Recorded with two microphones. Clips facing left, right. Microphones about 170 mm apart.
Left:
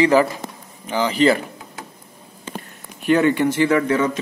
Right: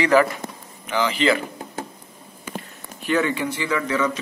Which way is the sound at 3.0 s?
60° left (ahead or behind).